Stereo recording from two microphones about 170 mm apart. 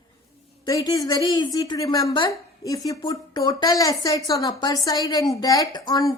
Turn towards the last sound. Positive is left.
turn(degrees=25)  # may be behind; listen again after turning